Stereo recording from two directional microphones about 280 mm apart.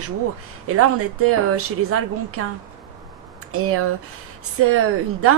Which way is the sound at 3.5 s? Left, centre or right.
Right.